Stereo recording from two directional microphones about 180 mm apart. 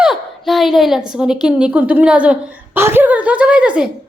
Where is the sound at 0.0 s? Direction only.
Centre (ahead or behind).